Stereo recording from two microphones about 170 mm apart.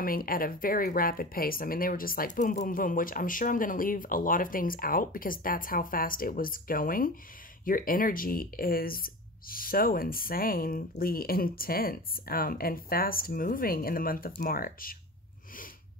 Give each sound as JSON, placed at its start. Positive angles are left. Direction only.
{"t": 0.0, "sound": "speech", "side_deg": 60}